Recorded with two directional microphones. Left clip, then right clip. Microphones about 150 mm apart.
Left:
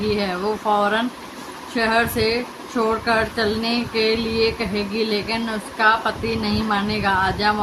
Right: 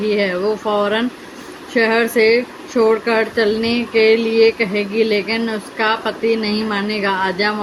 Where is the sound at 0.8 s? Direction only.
15° right (ahead or behind).